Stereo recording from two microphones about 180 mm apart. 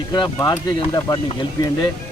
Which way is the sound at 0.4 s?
20° left (ahead or behind).